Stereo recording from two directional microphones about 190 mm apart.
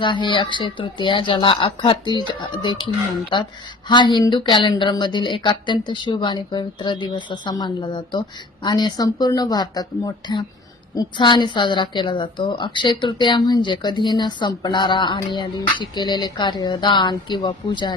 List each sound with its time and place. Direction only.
0.0 s a woman's voice: 25° left (ahead or behind)